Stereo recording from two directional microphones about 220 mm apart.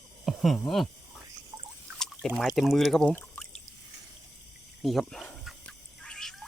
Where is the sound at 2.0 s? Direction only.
Centre (ahead or behind).